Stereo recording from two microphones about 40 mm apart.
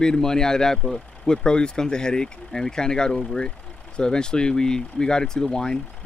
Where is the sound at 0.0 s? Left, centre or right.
Centre.